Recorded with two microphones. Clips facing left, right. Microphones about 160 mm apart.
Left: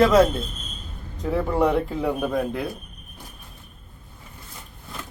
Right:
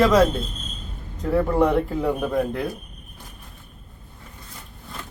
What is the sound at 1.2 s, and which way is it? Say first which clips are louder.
Speech: right 2 dB; 5° left (ahead or behind).